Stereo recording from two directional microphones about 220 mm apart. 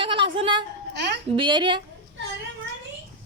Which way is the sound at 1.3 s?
20° right (ahead or behind).